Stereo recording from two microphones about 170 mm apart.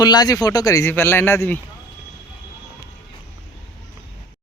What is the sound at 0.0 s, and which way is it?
A man's voice, 25° left (ahead or behind).